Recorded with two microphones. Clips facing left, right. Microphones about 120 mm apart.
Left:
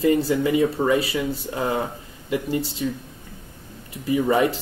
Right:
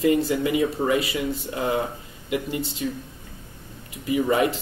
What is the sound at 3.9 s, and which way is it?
Speech, 30° left (ahead or behind).